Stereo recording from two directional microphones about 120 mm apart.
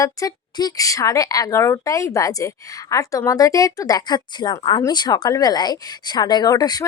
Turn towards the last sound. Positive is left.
turn(degrees=35)  # may be behind; listen again after turning